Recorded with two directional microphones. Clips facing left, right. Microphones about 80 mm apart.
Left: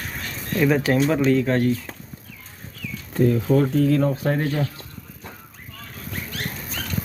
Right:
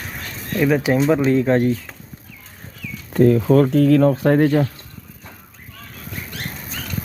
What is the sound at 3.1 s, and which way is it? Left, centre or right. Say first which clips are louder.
Speech: right 5 dB; right.